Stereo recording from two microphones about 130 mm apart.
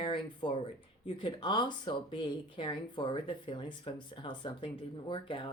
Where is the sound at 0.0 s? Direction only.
40° left (ahead or behind).